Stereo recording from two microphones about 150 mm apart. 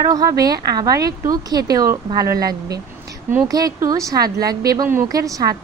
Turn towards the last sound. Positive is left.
turn(degrees=-25)  # may be behind; listen again after turning